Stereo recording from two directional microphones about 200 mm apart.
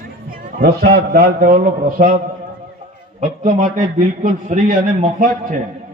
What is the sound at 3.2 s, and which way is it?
A man's voice, 40° right (ahead or behind).